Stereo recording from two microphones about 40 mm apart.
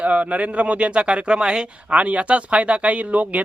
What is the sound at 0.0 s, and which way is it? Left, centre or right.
A man's voice, right.